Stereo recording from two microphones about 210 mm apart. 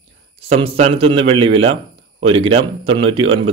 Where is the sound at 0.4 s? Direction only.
25° right (ahead or behind).